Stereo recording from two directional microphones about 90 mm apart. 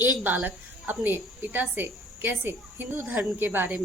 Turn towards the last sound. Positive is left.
turn(degrees=-20)  # may be behind; listen again after turning